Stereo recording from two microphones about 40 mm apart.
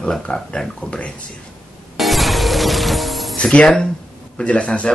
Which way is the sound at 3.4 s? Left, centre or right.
Left.